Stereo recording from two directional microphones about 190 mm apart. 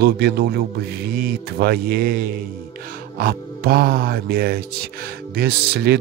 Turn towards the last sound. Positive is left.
turn(degrees=-55)  # may be behind; listen again after turning